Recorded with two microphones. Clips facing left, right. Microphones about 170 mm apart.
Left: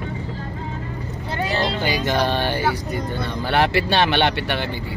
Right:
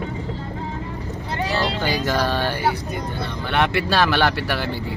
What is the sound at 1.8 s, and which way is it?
Speech, 15° left (ahead or behind).